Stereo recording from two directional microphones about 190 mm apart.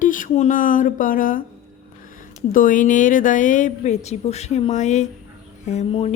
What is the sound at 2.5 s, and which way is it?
Speech, 45° left (ahead or behind).